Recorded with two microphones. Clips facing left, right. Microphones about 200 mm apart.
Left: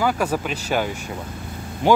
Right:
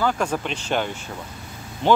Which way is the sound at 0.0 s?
10° left (ahead or behind).